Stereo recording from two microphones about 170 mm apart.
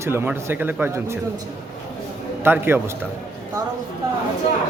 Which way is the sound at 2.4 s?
15° right (ahead or behind).